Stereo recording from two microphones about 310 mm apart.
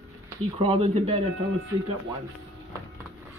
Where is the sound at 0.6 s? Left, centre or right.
Centre.